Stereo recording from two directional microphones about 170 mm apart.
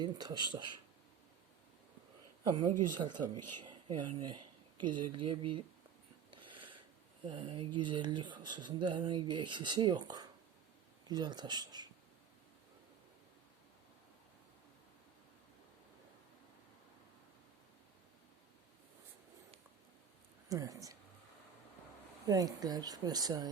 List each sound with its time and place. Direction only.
0.0 s speech: 25° right (ahead or behind)
2.4 s speech: 25° right (ahead or behind)
6.3 s a sound: 30° right (ahead or behind)
7.3 s speech: 30° right (ahead or behind)
20.5 s speech: 20° right (ahead or behind)
22.3 s speech: 20° right (ahead or behind)